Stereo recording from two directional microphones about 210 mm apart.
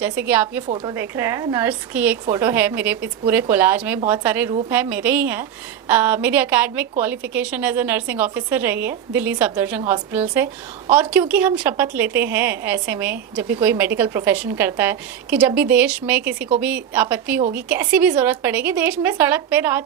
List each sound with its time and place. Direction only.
0.0 s a woman's voice: 10° right (ahead or behind)
0.7 s a woman's voice: 25° right (ahead or behind)
0.9 s a woman's voice: 10° right (ahead or behind)